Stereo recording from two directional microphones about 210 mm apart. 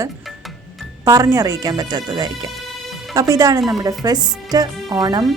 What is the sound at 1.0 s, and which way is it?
Speech, 15° right (ahead or behind).